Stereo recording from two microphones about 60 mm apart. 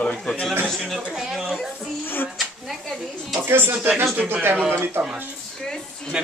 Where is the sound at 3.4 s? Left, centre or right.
Right.